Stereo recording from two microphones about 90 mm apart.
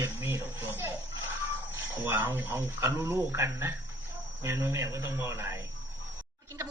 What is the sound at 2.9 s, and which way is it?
A woman's voice, 35° right (ahead or behind).